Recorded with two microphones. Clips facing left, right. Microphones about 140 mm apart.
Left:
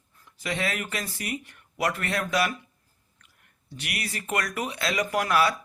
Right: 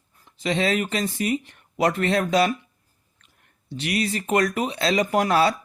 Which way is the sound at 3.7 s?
25° right (ahead or behind).